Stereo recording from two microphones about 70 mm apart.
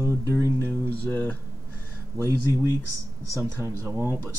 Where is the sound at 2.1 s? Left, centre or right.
Right.